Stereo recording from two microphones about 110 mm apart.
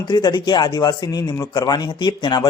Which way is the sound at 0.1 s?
40° left (ahead or behind).